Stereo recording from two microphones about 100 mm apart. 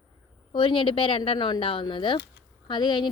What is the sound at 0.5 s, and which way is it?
A woman's voice, 55° left (ahead or behind).